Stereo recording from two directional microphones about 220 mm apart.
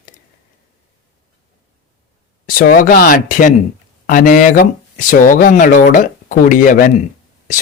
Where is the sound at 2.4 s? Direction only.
40° left (ahead or behind).